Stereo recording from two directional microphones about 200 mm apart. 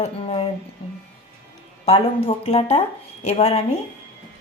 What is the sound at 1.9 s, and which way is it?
Speech, 30° left (ahead or behind).